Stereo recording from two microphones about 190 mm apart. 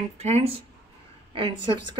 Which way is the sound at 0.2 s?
35° right (ahead or behind).